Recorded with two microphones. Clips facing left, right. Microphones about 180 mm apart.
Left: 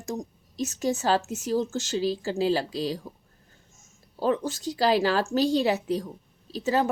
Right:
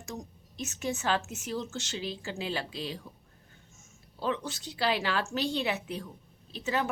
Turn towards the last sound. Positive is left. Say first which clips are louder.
# left 7 dB
turn(degrees=35)  # may be behind; listen again after turning